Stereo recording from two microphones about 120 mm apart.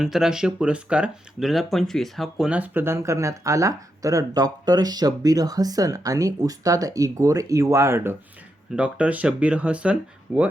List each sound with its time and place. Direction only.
0.0 s speech: 5° right (ahead or behind); by 8.1 s 20° right (ahead or behind)
8.7 s speech: 10° right (ahead or behind)